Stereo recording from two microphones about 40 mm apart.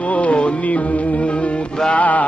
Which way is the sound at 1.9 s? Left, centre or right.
Left.